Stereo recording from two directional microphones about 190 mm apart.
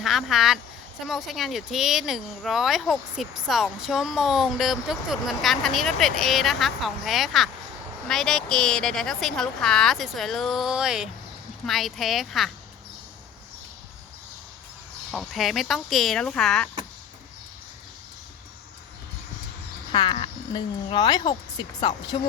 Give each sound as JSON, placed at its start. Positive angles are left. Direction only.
{"t": 0.0, "sound": "speech", "side_deg": 0}
{"t": 15.1, "sound": "speech", "side_deg": 0}
{"t": 19.9, "sound": "speech", "side_deg": 25}